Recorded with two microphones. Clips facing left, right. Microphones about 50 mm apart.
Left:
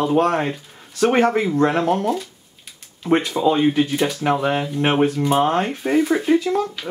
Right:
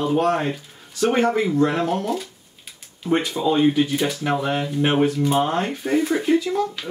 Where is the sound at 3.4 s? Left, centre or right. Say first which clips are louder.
Left 4 dB; left.